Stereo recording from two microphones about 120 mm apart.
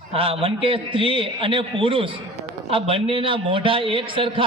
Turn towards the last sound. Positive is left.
turn(degrees=-45)  # may be behind; listen again after turning